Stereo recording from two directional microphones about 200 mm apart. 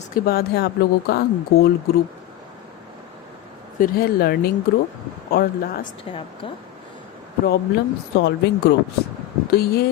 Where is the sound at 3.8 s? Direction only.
50° left (ahead or behind).